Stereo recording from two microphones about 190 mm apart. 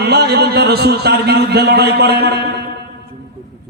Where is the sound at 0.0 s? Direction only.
55° right (ahead or behind).